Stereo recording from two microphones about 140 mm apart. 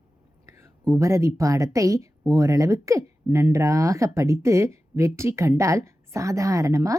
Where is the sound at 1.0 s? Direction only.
20° right (ahead or behind).